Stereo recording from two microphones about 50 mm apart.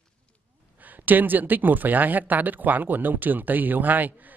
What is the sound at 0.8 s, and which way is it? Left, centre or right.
A man's voice, right.